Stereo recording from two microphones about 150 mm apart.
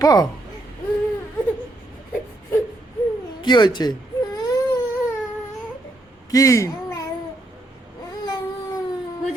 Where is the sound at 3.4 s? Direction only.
30° left (ahead or behind).